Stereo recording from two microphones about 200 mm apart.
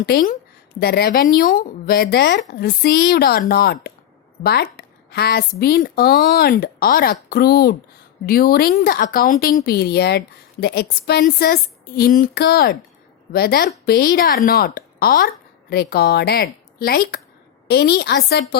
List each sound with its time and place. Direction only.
0.0 s speech: 50° left (ahead or behind)